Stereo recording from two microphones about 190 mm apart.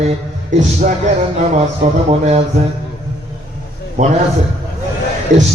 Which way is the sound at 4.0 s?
40° right (ahead or behind).